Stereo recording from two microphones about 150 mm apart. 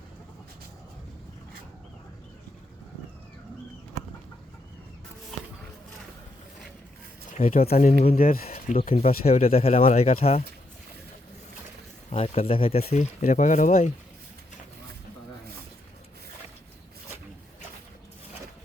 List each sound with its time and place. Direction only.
7.3 s speech: 55° left (ahead or behind)
8.1 s speech: 75° left (ahead or behind)
8.5 s a sound: 50° left (ahead or behind)
9.0 s speech: 45° left (ahead or behind)
12.1 s speech: 40° left (ahead or behind); by 13.9 s 60° left (ahead or behind)